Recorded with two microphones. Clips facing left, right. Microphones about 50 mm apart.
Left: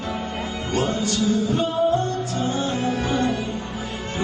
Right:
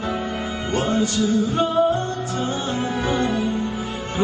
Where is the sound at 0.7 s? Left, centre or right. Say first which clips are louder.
Right 2 dB; right.